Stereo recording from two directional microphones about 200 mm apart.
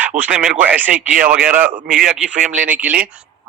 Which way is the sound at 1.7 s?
40° right (ahead or behind).